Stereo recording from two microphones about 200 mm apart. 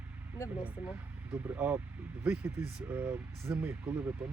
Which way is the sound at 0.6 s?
5° right (ahead or behind).